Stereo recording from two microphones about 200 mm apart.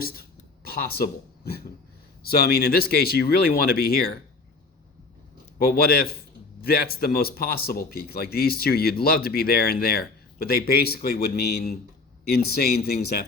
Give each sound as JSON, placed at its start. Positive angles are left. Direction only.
{"t": 0.0, "sound": "a sound", "side_deg": 50}
{"t": 2.2, "sound": "speech", "side_deg": 50}
{"t": 5.5, "sound": "speech", "side_deg": 50}